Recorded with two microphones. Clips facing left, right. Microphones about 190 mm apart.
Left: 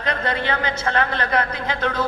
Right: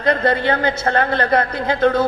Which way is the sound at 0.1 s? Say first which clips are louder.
Right 7 dB; 40° right (ahead or behind).